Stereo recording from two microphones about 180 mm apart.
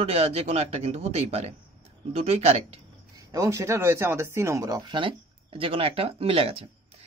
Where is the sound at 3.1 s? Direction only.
15° right (ahead or behind).